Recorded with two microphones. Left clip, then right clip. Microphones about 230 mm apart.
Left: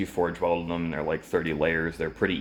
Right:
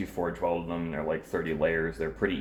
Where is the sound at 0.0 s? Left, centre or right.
Left.